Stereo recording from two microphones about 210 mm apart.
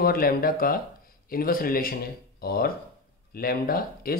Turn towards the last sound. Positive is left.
turn(degrees=45)  # may be behind; listen again after turning